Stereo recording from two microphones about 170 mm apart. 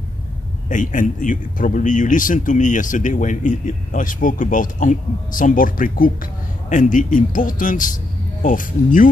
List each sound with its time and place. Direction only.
0.7 s speech: 50° left (ahead or behind)